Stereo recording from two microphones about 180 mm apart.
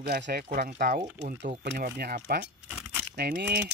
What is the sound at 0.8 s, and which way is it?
Speech, 45° right (ahead or behind).